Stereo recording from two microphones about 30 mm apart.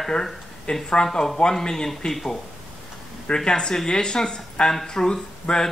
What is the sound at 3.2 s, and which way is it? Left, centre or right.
Speech, left.